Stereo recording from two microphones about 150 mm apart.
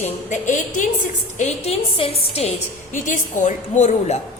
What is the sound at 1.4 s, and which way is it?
A woman's voice, 40° left (ahead or behind).